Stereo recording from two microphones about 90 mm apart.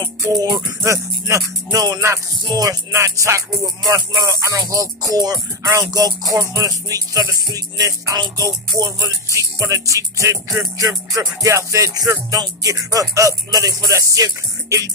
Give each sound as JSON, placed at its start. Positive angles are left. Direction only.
{"t": 0.2, "sound": "music", "side_deg": -35}